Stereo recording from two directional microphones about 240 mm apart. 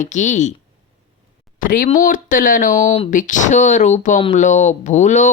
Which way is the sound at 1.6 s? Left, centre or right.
Left.